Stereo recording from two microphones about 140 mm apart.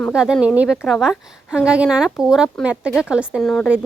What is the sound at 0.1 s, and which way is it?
A woman's voice, 5° right (ahead or behind).